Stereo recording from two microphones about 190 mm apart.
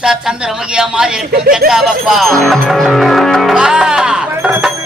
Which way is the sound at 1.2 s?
50° right (ahead or behind).